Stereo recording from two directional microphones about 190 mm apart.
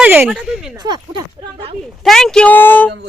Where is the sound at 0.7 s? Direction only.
20° right (ahead or behind).